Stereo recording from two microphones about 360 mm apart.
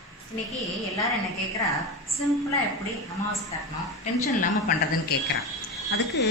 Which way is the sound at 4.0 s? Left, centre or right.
Left.